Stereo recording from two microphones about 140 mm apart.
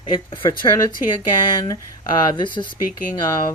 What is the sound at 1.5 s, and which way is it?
Speech, 30° left (ahead or behind).